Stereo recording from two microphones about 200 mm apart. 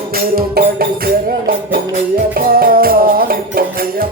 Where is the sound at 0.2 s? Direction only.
50° right (ahead or behind).